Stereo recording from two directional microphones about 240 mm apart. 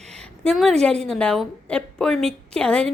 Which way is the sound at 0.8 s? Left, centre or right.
Centre.